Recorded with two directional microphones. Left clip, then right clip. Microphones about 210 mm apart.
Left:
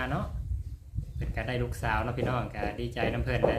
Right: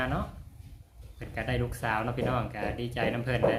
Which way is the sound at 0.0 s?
Centre (ahead or behind).